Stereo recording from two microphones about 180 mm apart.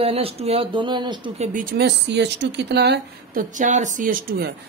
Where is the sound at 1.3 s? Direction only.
45° right (ahead or behind).